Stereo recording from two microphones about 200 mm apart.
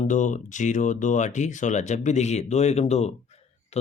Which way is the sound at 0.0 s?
40° left (ahead or behind).